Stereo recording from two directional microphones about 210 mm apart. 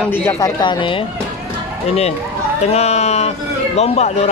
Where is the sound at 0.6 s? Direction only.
25° left (ahead or behind).